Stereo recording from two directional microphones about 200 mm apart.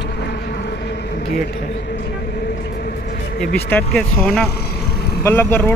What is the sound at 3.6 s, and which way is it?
Speech, 10° left (ahead or behind).